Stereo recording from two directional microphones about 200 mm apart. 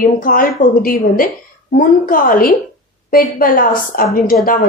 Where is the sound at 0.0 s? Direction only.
45° left (ahead or behind).